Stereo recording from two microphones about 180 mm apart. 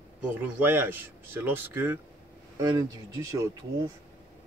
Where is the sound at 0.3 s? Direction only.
10° right (ahead or behind).